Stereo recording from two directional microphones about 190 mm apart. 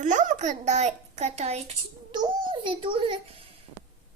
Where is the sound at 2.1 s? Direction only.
25° right (ahead or behind).